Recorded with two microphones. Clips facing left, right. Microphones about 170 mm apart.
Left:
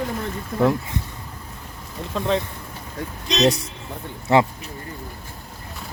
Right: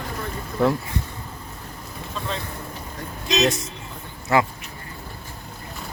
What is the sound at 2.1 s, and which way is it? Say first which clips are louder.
Speech: left 9 dB; 70° left (ahead or behind).